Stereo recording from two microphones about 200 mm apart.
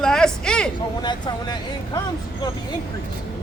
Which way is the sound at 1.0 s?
20° left (ahead or behind).